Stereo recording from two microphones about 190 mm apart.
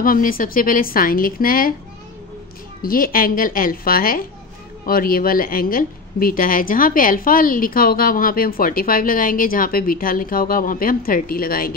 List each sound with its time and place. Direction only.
0.0 s speech: 50° left (ahead or behind)
2.8 s speech: 50° left (ahead or behind)